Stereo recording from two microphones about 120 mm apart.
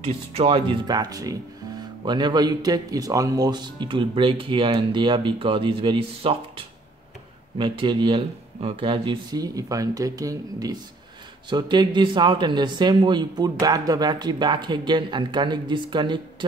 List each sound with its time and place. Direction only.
0.0 s speech: 55° right (ahead or behind)
0.8 s speech: 35° right (ahead or behind)
9.4 s speech: 30° right (ahead or behind)